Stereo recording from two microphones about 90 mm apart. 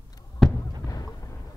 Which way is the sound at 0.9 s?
35° left (ahead or behind).